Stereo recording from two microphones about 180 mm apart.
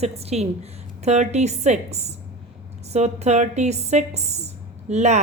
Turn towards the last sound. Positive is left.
turn(degrees=-40)  # may be behind; listen again after turning